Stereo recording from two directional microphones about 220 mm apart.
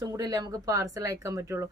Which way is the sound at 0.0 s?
15° right (ahead or behind).